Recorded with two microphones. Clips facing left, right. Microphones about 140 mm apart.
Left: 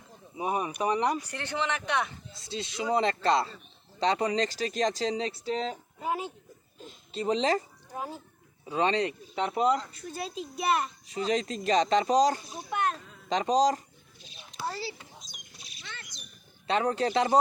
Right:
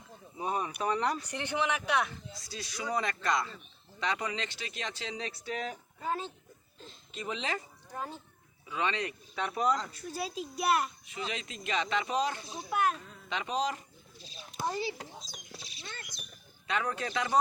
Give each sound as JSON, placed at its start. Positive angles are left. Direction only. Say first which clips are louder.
{"t": 0.3, "sound": "speech", "louder": "left 4 dB", "side_deg": 15}
{"t": 1.3, "sound": "speech", "louder": "even", "side_deg": -15}
{"t": 2.3, "sound": "speech", "louder": "left 6 dB", "side_deg": 25}
{"t": 6.0, "sound": "speech", "louder": "left 3 dB", "side_deg": 10}
{"t": 7.1, "sound": "speech", "louder": "left 10 dB", "side_deg": 35}
{"t": 7.9, "sound": "speech", "louder": "left 3 dB", "side_deg": 10}
{"t": 8.6, "sound": "speech", "louder": "left 7 dB", "side_deg": 35}
{"t": 9.9, "sound": "a child's voice", "louder": "left 1 dB", "side_deg": 0}
{"t": 11.0, "sound": "speech", "louder": "left 10 dB", "side_deg": 35}
{"t": 12.7, "sound": "speech", "louder": "even", "side_deg": -5}
{"t": 13.2, "sound": "speech", "louder": "left 9 dB", "side_deg": 35}
{"t": 14.6, "sound": "speech", "louder": "right 2 dB", "side_deg": -15}
{"t": 15.2, "sound": "a sound", "louder": "right 5 dB", "side_deg": -30}
{"t": 16.6, "sound": "speech", "louder": "left 7 dB", "side_deg": 30}